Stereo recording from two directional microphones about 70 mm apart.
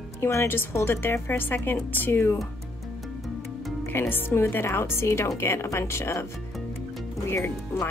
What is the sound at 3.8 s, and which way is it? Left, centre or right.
A woman's voice, left.